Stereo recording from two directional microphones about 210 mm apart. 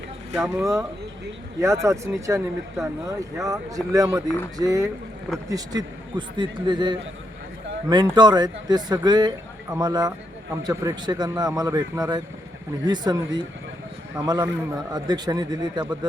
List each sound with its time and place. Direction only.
0.3 s a man's voice: 15° right (ahead or behind)